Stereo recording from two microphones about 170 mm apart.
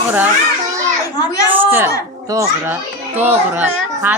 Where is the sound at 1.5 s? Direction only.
10° right (ahead or behind).